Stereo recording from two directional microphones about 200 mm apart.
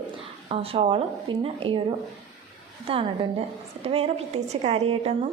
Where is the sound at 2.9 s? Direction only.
25° right (ahead or behind).